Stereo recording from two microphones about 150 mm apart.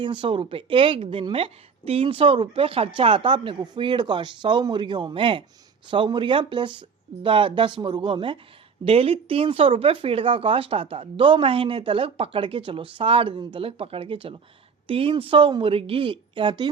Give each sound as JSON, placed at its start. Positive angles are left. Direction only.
{"t": 0.0, "sound": "speech", "side_deg": -35}